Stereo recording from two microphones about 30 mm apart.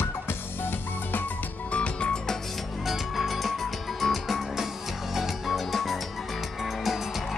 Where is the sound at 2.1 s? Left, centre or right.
Left.